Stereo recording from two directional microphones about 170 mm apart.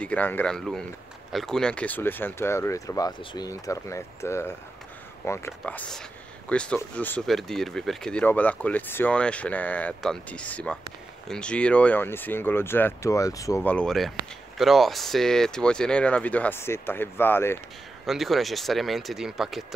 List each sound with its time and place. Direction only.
0.0 s speech: 10° left (ahead or behind)
18.0 s speech: centre (ahead or behind)